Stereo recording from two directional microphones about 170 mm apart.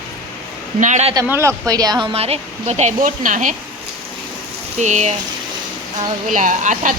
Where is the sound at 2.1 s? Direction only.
35° right (ahead or behind).